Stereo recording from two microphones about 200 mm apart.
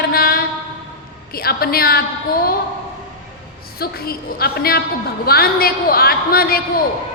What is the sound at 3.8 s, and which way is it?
A woman's voice, 50° left (ahead or behind).